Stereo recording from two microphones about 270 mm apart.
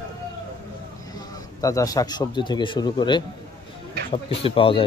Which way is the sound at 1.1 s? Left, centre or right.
Centre.